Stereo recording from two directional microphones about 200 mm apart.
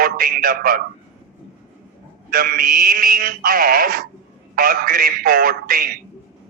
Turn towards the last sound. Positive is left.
turn(degrees=-45)  # may be behind; listen again after turning